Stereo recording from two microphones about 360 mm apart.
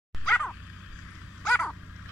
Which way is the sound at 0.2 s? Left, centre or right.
Centre.